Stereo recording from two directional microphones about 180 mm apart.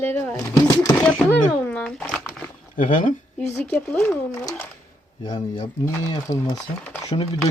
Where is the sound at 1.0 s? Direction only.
5° left (ahead or behind).